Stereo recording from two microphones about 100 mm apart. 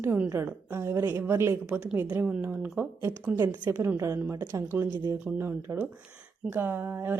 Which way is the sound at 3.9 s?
30° right (ahead or behind).